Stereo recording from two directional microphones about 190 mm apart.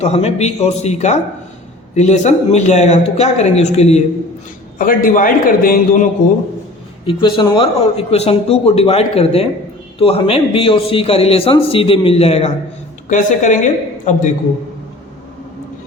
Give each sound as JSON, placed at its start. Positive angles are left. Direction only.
{"t": 0.0, "sound": "speech", "side_deg": 35}
{"t": 4.8, "sound": "a man's voice", "side_deg": 45}
{"t": 7.0, "sound": "speech", "side_deg": 25}